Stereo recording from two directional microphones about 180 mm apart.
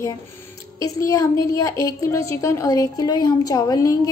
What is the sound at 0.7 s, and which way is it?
A woman's voice, 15° left (ahead or behind).